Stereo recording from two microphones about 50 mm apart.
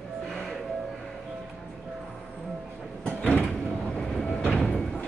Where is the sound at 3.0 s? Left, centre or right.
Left.